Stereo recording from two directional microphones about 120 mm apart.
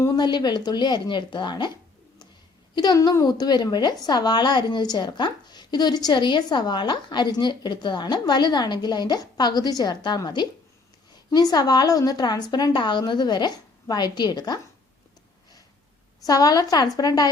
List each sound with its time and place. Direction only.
0.0 s speech: 25° left (ahead or behind)
2.7 s speech: 35° left (ahead or behind)
16.2 s speech: 30° left (ahead or behind)